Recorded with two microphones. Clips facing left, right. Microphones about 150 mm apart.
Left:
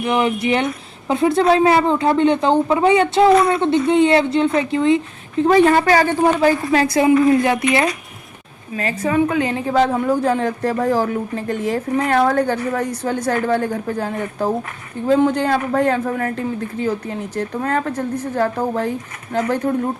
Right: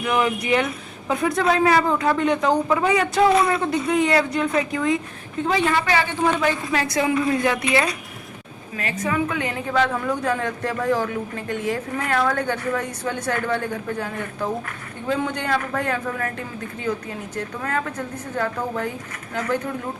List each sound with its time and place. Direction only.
0.0 s a woman's voice: 25° left (ahead or behind)
5.5 s a woman's voice: 45° left (ahead or behind)
17.3 s a woman's voice: 30° left (ahead or behind)